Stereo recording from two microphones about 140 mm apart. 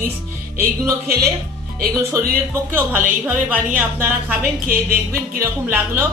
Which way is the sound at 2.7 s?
15° right (ahead or behind).